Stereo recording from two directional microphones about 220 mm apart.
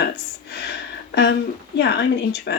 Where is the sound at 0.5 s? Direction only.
50° left (ahead or behind).